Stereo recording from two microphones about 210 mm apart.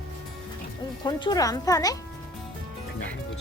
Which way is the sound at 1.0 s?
20° left (ahead or behind).